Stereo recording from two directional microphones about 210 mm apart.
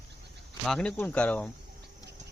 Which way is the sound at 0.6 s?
5° left (ahead or behind).